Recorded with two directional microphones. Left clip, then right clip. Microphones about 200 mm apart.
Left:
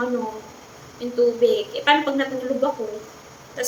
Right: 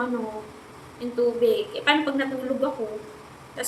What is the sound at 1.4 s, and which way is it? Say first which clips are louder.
Speech: left 3 dB; 5° right (ahead or behind).